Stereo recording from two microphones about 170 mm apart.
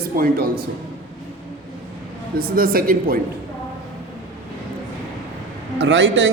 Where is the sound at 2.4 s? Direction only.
60° right (ahead or behind).